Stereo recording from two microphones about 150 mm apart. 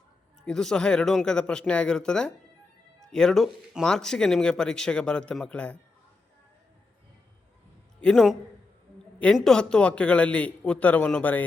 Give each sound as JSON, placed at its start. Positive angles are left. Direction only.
{"t": 0.4, "sound": "speech", "side_deg": 5}
{"t": 8.0, "sound": "a man's voice", "side_deg": 0}